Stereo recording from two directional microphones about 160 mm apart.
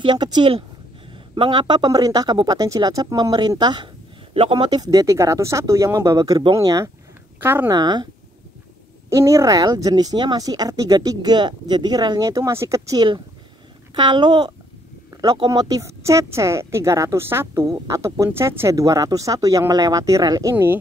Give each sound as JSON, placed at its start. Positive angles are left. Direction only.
{"t": 0.0, "sound": "speech", "side_deg": -25}
{"t": 7.6, "sound": "speech", "side_deg": -25}
{"t": 9.1, "sound": "speech", "side_deg": -20}